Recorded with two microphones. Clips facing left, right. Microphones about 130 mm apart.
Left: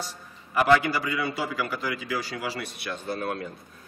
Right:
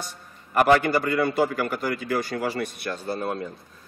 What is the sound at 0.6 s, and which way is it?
A man's voice, 55° right (ahead or behind).